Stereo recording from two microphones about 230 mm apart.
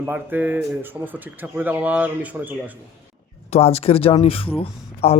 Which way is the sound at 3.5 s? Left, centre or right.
Left.